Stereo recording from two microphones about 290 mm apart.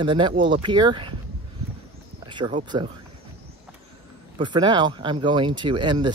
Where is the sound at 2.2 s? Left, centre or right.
Centre.